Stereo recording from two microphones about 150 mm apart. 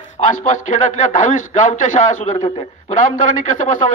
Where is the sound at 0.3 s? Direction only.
55° left (ahead or behind).